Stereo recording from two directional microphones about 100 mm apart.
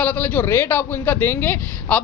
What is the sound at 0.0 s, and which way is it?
Speech, 15° left (ahead or behind).